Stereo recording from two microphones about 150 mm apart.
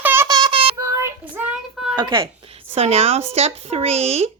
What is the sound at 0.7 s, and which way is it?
Child singing, 20° right (ahead or behind).